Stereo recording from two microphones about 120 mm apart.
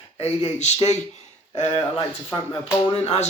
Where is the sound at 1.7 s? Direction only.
45° left (ahead or behind).